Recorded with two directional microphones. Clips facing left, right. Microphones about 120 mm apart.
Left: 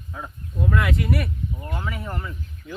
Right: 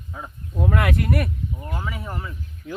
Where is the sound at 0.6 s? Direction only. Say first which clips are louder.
Right 1 dB; 65° right (ahead or behind).